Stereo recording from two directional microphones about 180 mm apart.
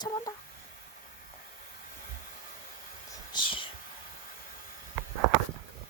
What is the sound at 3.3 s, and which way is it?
Whispering, 25° left (ahead or behind).